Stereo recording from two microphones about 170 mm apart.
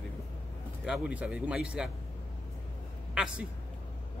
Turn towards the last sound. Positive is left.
turn(degrees=-5)  # may be behind; listen again after turning